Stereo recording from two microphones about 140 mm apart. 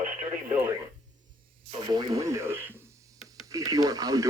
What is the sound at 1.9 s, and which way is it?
Speech, 25° right (ahead or behind).